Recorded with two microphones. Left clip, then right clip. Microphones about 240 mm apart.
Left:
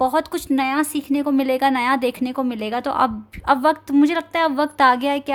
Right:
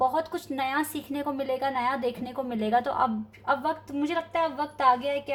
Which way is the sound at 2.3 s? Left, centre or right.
Left.